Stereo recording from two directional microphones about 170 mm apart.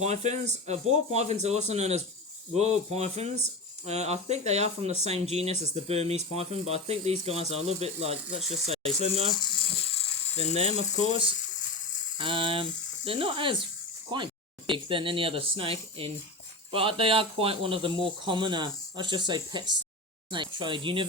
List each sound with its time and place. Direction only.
0.0 s speech: 40° right (ahead or behind)
9.3 s speech: 25° left (ahead or behind)
10.5 s speech: 35° right (ahead or behind)
12.1 s a sound: 30° right (ahead or behind)
13.1 s speech: 30° right (ahead or behind)